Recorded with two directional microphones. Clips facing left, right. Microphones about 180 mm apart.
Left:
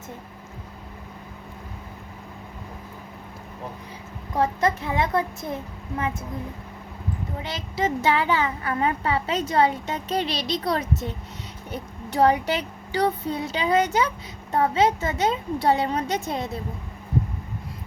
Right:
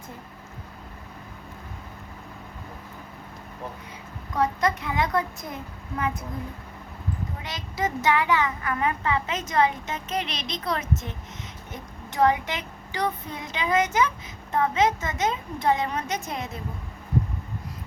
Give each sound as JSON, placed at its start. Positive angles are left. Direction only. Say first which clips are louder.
{"t": 4.4, "sound": "speech", "louder": "left 2 dB", "side_deg": 30}
{"t": 7.4, "sound": "a woman's voice", "louder": "left 3 dB", "side_deg": 25}